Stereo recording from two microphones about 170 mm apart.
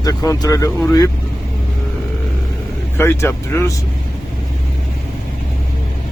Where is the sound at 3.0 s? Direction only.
15° left (ahead or behind).